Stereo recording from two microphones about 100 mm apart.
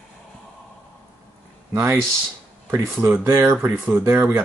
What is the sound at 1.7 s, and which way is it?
Speech, 20° right (ahead or behind).